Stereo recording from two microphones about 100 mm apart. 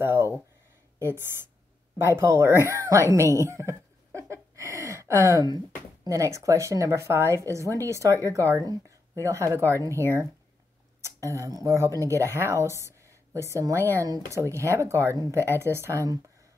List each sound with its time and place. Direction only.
0.0 s speech: 25° right (ahead or behind)
15.5 s speech: 25° right (ahead or behind)